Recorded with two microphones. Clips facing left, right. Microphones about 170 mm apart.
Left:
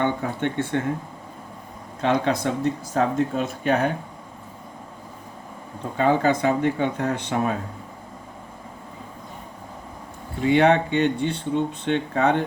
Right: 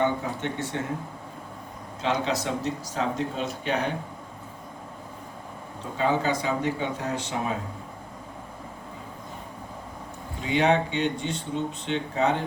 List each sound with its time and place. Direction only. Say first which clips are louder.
0.0 s speech: left 2 dB; 55° left (ahead or behind)
2.0 s speech: left 5 dB; 55° left (ahead or behind)
6.0 s speech: left 5 dB; 55° left (ahead or behind)
10.4 s speech: left 5 dB; 55° left (ahead or behind)